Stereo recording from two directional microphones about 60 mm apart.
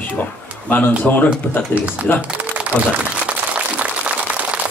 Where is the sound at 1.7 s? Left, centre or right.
Centre.